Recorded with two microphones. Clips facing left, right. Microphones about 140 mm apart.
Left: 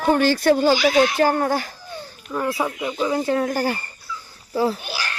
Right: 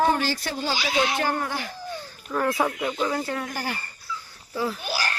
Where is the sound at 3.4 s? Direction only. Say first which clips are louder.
Left 9 dB; 40° left (ahead or behind).